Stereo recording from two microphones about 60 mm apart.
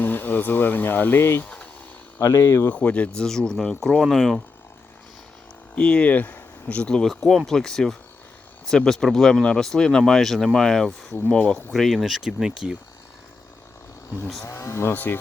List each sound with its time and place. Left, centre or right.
0.0 s speech: left
2.2 s speech: left
2.6 s speech: left
3.2 s speech: centre
5.7 s speech: centre
6.9 s speech: centre
11.7 s speech: centre
14.4 s speech: left
14.9 s speech: left